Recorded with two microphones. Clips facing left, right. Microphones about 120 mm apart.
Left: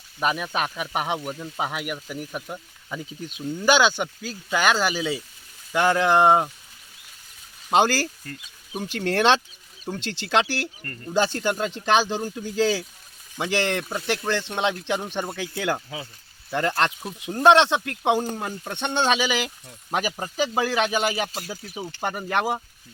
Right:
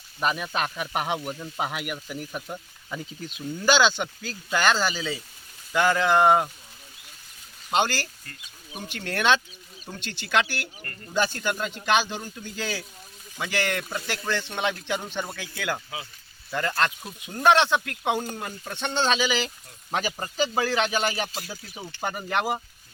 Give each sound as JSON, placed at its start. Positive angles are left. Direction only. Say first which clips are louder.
{"t": 0.2, "sound": "a man's voice", "louder": "left 2 dB", "side_deg": 5}
{"t": 7.8, "sound": "speech", "louder": "left 5 dB", "side_deg": 40}
{"t": 9.0, "sound": "a man's voice", "louder": "left 3 dB", "side_deg": 30}